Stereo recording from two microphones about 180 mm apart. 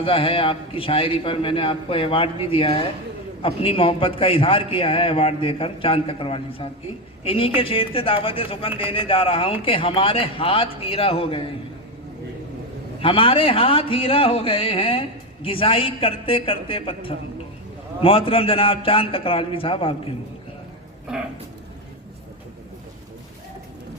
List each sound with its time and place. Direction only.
0.0 s a man's voice: 30° left (ahead or behind)
13.0 s a man's voice: 30° left (ahead or behind)